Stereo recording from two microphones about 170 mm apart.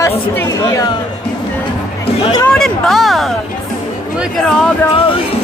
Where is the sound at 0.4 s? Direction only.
20° left (ahead or behind).